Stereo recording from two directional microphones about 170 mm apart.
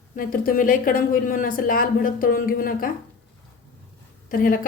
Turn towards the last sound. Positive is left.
turn(degrees=55)  # may be behind; listen again after turning